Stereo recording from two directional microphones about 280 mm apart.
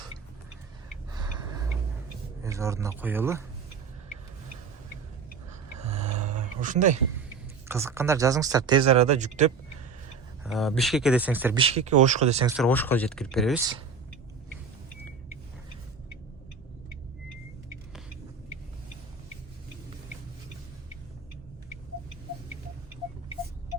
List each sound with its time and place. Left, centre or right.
1.1 s a sound: centre
2.4 s speech: centre
5.8 s a sound: right
7.7 s speech: centre; by 9.5 s right
10.4 s speech: centre
11.5 s speech: right
12.6 s speech: centre